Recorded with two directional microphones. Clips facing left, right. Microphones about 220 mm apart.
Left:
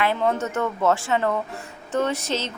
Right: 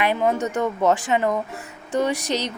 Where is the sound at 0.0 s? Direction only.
15° right (ahead or behind).